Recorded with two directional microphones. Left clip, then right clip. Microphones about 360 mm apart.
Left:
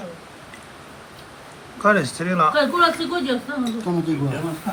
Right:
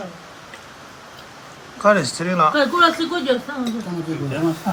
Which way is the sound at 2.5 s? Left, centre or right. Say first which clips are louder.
Right 2 dB; right.